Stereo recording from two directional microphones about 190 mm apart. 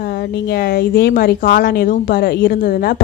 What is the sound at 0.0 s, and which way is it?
Speech, 55° left (ahead or behind).